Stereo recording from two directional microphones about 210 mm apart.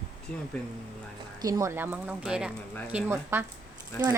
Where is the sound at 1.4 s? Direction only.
15° right (ahead or behind).